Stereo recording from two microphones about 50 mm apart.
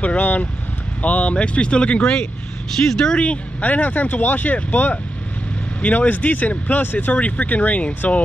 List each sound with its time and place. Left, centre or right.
0.0 s speech: left
3.6 s speech: left